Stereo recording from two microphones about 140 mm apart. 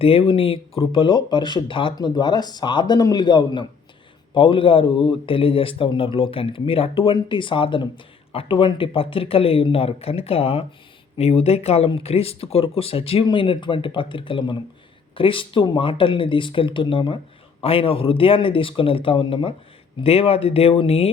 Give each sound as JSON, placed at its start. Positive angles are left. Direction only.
{"t": 0.0, "sound": "speech", "side_deg": 45}